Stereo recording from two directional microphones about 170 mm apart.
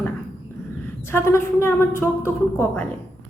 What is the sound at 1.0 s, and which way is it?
A woman's voice, 15° left (ahead or behind).